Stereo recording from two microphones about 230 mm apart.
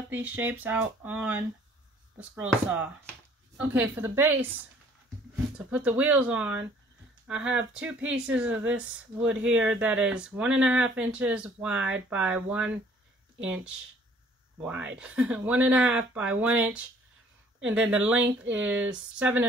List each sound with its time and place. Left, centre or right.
0.1 s speech: centre